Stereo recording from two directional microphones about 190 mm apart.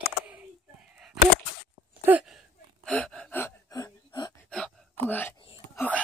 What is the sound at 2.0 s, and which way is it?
Gasp, 5° right (ahead or behind).